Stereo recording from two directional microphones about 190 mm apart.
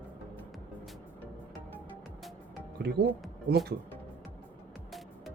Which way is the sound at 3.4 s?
55° right (ahead or behind).